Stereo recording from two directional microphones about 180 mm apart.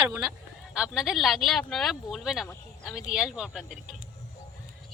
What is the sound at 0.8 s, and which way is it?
Speech, 5° right (ahead or behind).